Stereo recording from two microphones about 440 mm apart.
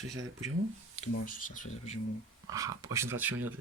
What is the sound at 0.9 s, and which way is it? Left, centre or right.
Speech, centre.